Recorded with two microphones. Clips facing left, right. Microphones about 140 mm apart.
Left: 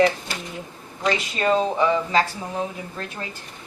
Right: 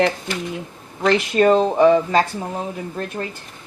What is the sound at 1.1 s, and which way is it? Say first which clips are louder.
Speech: right 7 dB; 50° right (ahead or behind).